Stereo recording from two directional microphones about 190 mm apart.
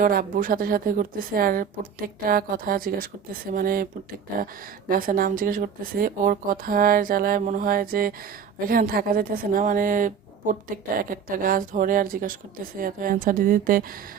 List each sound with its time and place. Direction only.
0.0 s a woman's voice: 50° right (ahead or behind)
4.9 s a woman's voice: 50° right (ahead or behind)